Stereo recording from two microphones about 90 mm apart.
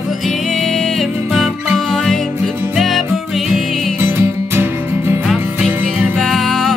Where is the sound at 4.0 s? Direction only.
25° right (ahead or behind).